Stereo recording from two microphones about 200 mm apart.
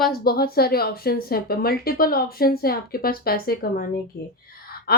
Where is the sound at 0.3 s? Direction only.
50° left (ahead or behind).